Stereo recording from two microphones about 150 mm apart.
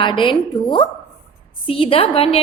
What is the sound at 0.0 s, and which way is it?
A woman's voice, 35° left (ahead or behind).